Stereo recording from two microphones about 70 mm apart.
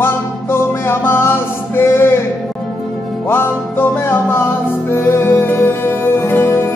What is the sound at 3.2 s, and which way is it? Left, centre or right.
Music, left.